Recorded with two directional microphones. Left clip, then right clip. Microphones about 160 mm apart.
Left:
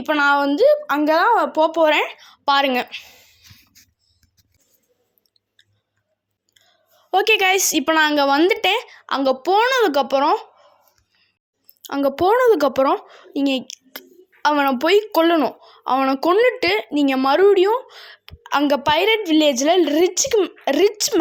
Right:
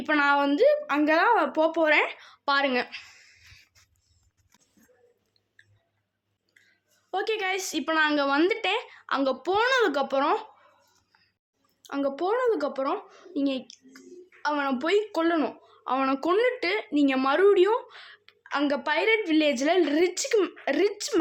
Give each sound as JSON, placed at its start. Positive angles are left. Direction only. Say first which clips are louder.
{"t": 0.0, "sound": "speech", "louder": "left 6 dB", "side_deg": 35}
{"t": 7.1, "sound": "speech", "louder": "left 12 dB", "side_deg": 55}
{"t": 11.8, "sound": "speech", "louder": "left 9 dB", "side_deg": 50}